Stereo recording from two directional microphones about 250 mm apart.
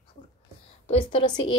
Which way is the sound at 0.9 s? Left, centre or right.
Left.